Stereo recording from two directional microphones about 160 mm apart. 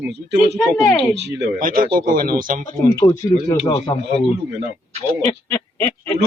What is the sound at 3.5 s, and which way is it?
Speech, 40° left (ahead or behind).